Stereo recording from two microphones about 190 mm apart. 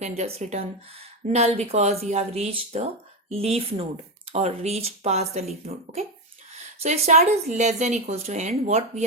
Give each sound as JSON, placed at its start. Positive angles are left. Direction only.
{"t": 0.2, "sound": "speech", "side_deg": -35}